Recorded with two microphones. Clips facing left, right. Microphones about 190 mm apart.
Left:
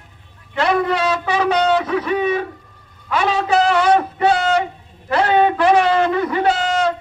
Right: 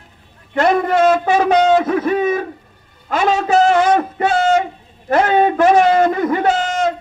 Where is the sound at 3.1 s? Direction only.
45° right (ahead or behind).